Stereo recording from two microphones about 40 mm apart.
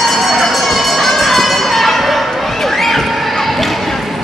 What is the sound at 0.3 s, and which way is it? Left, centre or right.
Music, centre.